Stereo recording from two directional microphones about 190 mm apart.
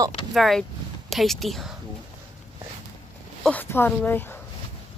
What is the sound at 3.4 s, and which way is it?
Speech, 10° left (ahead or behind).